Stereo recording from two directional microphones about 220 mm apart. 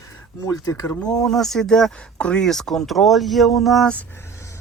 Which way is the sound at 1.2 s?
Centre (ahead or behind).